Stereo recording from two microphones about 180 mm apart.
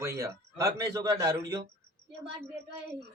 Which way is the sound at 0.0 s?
15° right (ahead or behind).